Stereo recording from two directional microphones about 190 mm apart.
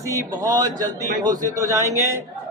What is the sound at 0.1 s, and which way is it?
Speech, 15° right (ahead or behind).